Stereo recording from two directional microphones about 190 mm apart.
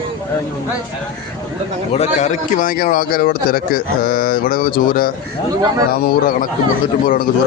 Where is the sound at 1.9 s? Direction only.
35° left (ahead or behind).